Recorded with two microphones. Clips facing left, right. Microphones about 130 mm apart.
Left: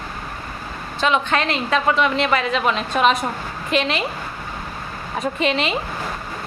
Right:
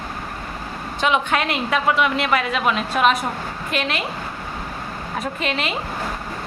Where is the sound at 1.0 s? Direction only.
10° right (ahead or behind).